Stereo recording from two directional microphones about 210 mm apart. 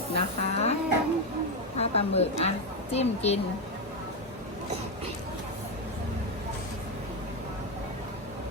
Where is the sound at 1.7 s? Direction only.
30° left (ahead or behind).